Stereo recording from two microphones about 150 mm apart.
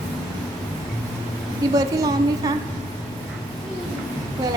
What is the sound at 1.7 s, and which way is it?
Speech, 25° right (ahead or behind).